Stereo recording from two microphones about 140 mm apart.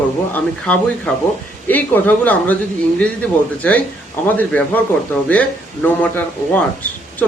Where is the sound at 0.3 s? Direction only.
10° left (ahead or behind).